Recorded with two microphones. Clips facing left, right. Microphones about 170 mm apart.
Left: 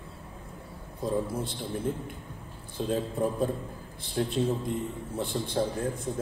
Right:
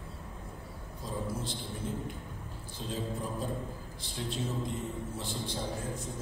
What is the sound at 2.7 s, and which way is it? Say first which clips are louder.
A man's voice: left 8 dB; 55° left (ahead or behind).